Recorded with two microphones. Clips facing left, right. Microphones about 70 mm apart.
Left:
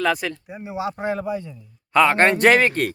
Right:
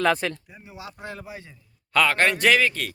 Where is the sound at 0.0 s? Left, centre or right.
Centre.